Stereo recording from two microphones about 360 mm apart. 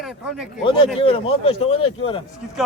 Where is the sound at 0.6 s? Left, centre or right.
Centre.